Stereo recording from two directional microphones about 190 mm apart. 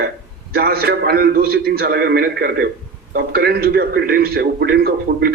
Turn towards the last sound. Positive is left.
turn(degrees=-55)  # may be behind; listen again after turning